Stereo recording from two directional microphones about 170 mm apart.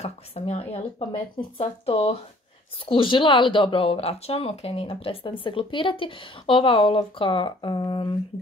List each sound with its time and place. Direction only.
0.0 s speech: 35° left (ahead or behind)